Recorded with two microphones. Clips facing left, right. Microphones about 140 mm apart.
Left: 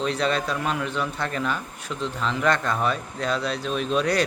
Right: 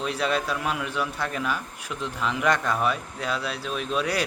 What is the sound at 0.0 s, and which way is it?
Speech, 10° right (ahead or behind).